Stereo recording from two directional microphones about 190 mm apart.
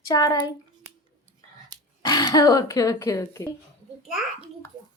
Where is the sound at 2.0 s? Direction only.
20° left (ahead or behind).